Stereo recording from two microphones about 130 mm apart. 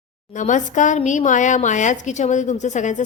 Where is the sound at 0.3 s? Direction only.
75° left (ahead or behind).